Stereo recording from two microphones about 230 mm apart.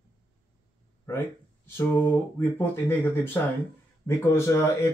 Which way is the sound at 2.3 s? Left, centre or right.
Centre.